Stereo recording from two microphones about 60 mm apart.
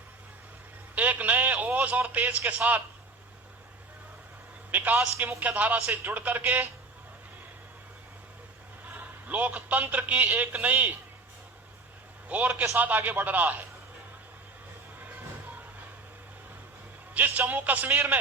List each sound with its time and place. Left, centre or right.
0.9 s radio: right
2.5 s speech: right
4.7 s a man's voice: right
8.9 s a man's voice: right
12.3 s speech: right
15.0 s music: right
17.2 s speech: right